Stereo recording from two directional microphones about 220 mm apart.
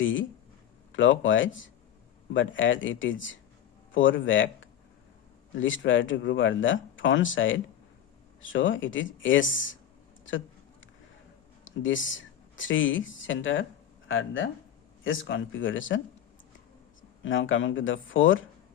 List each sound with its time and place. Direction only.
0.0 s speech: 60° left (ahead or behind)
11.8 s speech: 60° left (ahead or behind)
17.2 s speech: 60° left (ahead or behind)